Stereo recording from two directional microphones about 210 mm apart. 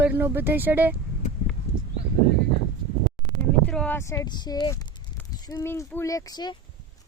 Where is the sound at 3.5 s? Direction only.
5° left (ahead or behind).